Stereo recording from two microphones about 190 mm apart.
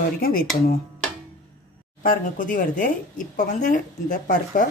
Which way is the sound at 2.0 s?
45° left (ahead or behind).